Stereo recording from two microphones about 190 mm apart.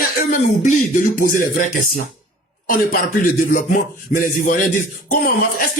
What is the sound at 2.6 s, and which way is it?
Speech, 45° left (ahead or behind).